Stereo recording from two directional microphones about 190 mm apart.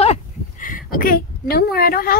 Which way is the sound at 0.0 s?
40° left (ahead or behind).